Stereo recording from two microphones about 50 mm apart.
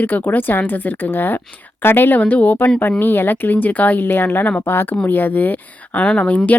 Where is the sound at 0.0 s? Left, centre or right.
Left.